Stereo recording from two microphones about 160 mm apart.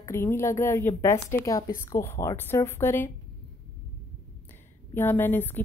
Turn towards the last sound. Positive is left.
turn(degrees=10)  # may be behind; listen again after turning